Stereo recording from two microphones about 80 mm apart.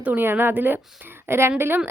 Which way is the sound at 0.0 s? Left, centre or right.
Right.